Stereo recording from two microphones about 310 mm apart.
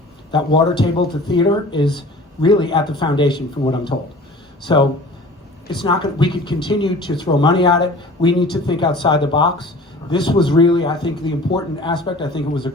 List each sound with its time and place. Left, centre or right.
0.3 s speech: centre